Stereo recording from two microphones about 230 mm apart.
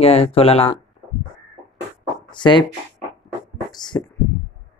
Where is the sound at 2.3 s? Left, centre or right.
Left.